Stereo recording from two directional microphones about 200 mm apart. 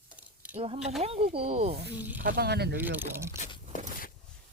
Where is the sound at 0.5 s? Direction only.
30° right (ahead or behind).